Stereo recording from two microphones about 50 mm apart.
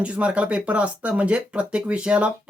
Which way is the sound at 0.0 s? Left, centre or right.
Right.